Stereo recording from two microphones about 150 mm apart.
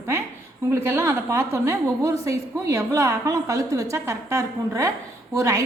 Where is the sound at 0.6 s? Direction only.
15° right (ahead or behind).